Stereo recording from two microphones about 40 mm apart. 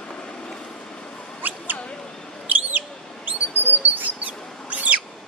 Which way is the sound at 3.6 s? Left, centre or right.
Right.